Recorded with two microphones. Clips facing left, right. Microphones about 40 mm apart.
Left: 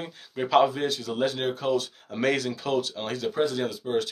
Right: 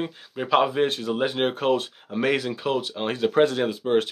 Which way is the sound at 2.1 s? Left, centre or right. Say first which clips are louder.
Right 2 dB; centre.